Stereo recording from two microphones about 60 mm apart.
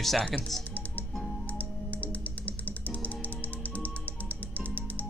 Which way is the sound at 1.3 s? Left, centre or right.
Left.